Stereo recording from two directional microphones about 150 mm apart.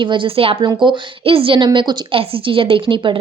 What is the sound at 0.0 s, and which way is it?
A woman's voice, 35° right (ahead or behind).